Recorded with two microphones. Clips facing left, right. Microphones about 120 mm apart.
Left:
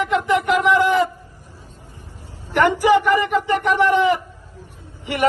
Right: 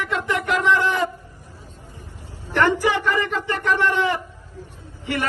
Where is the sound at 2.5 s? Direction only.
15° left (ahead or behind).